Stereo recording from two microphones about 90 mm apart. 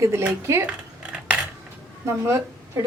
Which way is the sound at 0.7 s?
15° right (ahead or behind).